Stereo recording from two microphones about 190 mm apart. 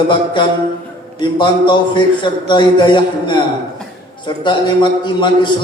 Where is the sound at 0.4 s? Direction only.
25° left (ahead or behind).